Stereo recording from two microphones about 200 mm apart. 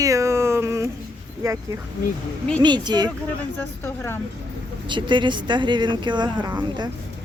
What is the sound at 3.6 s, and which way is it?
Speech, 10° left (ahead or behind).